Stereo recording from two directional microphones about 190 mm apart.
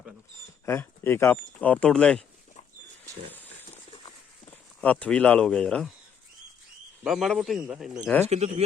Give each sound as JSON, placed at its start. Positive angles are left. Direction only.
{"t": 0.6, "sound": "speech", "side_deg": 10}
{"t": 4.8, "sound": "speech", "side_deg": 5}
{"t": 7.0, "sound": "speech", "side_deg": 0}
{"t": 8.3, "sound": "speech", "side_deg": -35}